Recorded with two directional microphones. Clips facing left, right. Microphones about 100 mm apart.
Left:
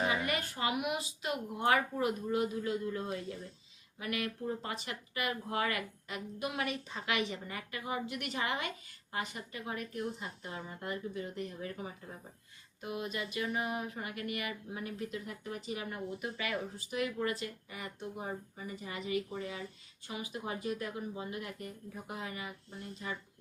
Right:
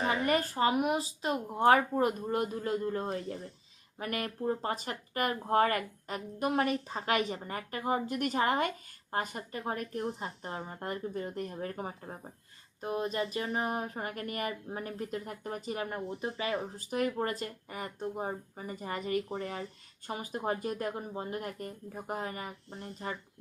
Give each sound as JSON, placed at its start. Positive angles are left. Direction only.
{"t": 0.1, "sound": "speech", "side_deg": -40}